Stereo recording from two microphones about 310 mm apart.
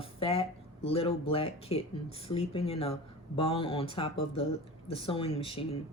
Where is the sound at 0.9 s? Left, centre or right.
Centre.